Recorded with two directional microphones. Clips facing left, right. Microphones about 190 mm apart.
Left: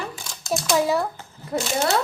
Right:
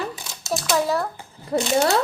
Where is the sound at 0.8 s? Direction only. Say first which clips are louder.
Left 1 dB; centre (ahead or behind).